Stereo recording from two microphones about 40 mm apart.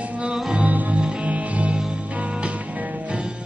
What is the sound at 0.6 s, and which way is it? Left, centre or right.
Music, right.